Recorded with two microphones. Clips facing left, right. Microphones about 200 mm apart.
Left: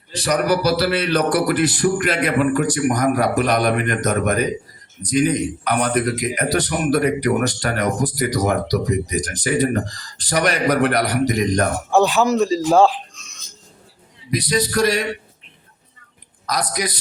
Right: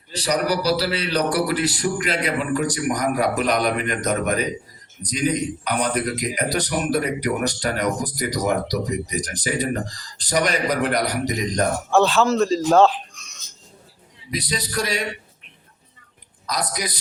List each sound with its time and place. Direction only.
0.1 s a man's voice: 50° left (ahead or behind)
11.9 s speech: 15° left (ahead or behind)
14.5 s a man's voice: 45° left (ahead or behind)